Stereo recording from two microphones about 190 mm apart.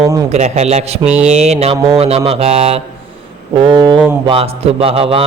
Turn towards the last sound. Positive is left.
turn(degrees=-30)  # may be behind; listen again after turning